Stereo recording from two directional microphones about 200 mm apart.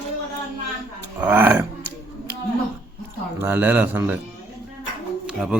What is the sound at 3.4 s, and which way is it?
Speech, 10° right (ahead or behind).